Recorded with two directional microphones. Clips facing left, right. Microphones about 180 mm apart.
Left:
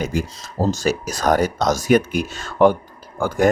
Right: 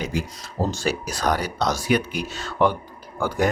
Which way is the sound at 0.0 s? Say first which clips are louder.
Left 4 dB; 45° left (ahead or behind).